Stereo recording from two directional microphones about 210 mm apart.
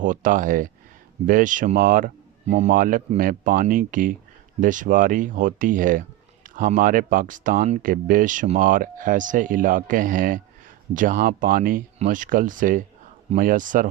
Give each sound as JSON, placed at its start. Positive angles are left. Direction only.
{"t": 0.0, "sound": "speech", "side_deg": -40}